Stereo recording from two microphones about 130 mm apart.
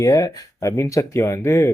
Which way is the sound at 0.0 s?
25° left (ahead or behind).